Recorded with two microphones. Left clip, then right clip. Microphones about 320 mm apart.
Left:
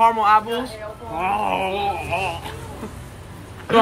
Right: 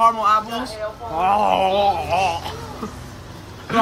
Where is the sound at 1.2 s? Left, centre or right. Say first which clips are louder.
Right 5 dB; right.